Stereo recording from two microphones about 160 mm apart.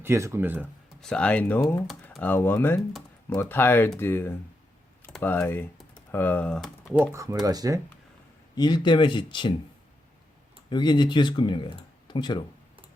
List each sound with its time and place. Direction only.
0.0 s speech: 15° right (ahead or behind)
1.0 s speech: 5° left (ahead or behind)
7.0 s speech: 20° right (ahead or behind)
8.5 s speech: 25° left (ahead or behind)
10.7 s speech: 30° left (ahead or behind)